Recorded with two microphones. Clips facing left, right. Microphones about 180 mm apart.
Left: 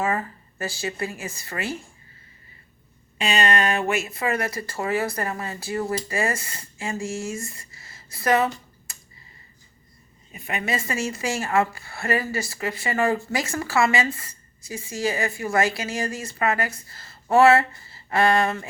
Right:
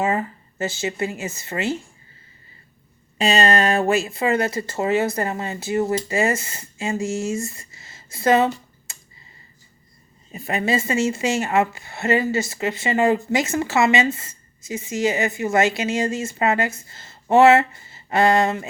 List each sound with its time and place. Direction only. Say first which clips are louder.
0.0 s a woman's voice: right 3 dB; 20° right (ahead or behind)
3.2 s a woman's voice: right 4 dB; 35° right (ahead or behind)
8.9 s computer keyboard: right 2 dB; 25° right (ahead or behind)
10.3 s a woman's voice: right 6 dB; 35° right (ahead or behind)